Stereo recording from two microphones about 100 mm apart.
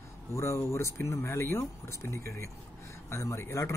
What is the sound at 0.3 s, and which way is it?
Speech, 30° left (ahead or behind).